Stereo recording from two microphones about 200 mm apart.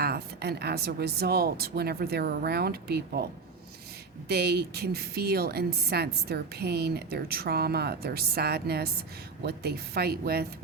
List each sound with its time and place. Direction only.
0.0 s a woman's voice: 55° right (ahead or behind)
4.3 s a woman's voice: 55° right (ahead or behind)